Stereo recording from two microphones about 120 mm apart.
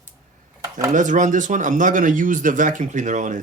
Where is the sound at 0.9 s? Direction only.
90° right.